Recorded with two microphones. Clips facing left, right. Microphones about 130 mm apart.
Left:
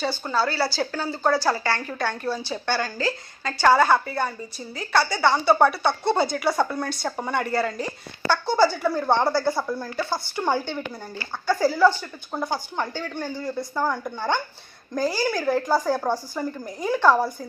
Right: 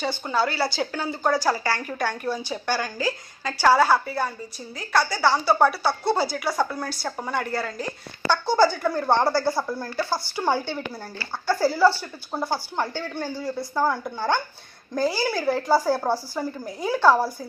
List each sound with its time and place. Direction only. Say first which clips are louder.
0.0 s a woman's voice: even; 20° right (ahead or behind)